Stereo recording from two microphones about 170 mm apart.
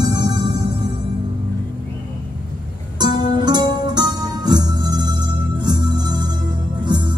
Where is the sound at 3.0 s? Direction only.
25° right (ahead or behind).